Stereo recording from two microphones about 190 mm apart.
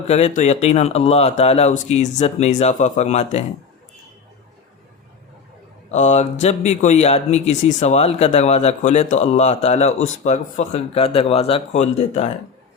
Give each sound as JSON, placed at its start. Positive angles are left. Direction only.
{"t": 0.1, "sound": "speech", "side_deg": 35}
{"t": 5.9, "sound": "speech", "side_deg": 35}